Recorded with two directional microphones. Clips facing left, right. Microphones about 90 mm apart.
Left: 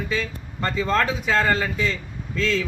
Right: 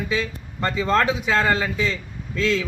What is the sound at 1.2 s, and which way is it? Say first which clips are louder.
A man's voice: even; 5° right (ahead or behind).